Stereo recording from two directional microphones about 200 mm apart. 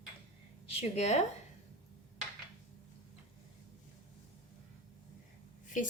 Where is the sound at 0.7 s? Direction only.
30° left (ahead or behind).